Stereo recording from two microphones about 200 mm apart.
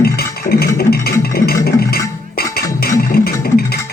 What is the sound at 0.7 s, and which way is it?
Music, 50° left (ahead or behind).